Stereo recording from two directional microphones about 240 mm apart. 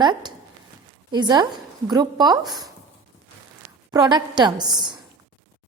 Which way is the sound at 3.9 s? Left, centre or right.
Centre.